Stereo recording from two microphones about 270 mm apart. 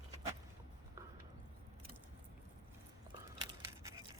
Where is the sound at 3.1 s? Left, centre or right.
Centre.